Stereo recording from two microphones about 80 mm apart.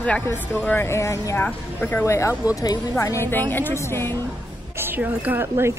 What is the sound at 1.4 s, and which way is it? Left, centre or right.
Speech, left.